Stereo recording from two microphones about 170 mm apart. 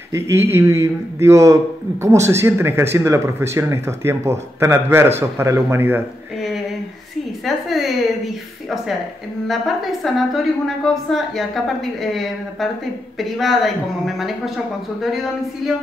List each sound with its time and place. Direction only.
0.1 s speech: 15° right (ahead or behind)
7.4 s a sound: centre (ahead or behind)
9.5 s a woman's voice: centre (ahead or behind)